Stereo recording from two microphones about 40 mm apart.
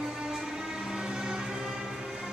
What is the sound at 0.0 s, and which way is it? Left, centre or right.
Music, centre.